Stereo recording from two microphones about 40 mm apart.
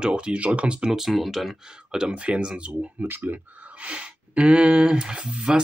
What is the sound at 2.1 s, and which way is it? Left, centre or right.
Speech, right.